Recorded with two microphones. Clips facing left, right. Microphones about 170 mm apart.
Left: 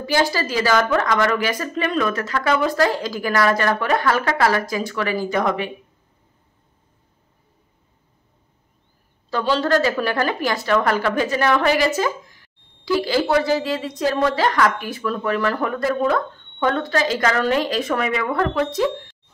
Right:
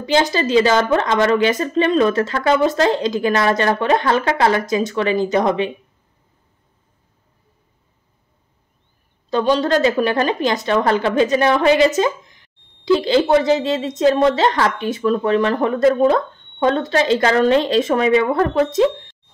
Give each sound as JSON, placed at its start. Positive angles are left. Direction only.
{"t": 0.0, "sound": "a woman's voice", "side_deg": -20}
{"t": 9.3, "sound": "a woman's voice", "side_deg": -15}